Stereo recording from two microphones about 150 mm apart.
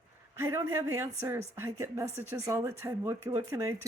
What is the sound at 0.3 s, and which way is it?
Speech, 15° right (ahead or behind).